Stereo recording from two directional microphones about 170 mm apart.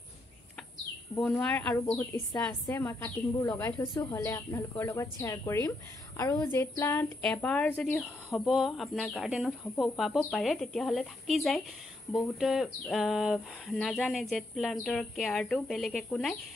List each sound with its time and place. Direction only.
1.1 s a woman's voice: 5° left (ahead or behind)
3.8 s a woman's voice: 25° left (ahead or behind); by 16.3 s 5° left (ahead or behind)